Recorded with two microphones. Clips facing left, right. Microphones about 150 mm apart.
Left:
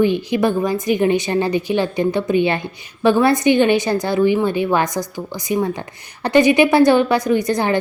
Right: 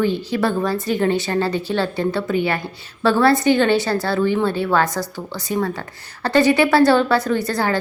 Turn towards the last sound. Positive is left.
turn(degrees=20)  # may be behind; listen again after turning